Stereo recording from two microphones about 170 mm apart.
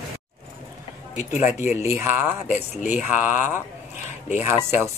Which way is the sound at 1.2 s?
45° left (ahead or behind).